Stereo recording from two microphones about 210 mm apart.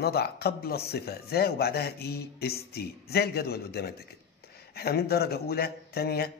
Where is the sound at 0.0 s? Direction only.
50° left (ahead or behind).